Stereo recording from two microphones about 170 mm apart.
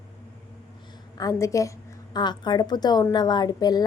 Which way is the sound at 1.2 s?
20° left (ahead or behind).